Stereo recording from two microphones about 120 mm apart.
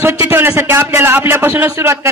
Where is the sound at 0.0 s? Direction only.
20° right (ahead or behind).